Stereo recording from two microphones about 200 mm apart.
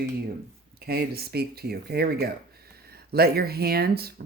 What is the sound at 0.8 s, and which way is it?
Speech, 50° right (ahead or behind).